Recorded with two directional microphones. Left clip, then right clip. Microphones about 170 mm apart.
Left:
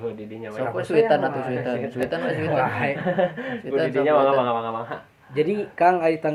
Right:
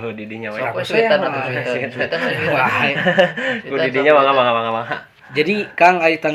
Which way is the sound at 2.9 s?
50° right (ahead or behind).